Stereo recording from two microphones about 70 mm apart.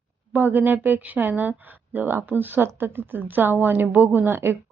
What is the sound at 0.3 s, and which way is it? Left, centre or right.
Speech, right.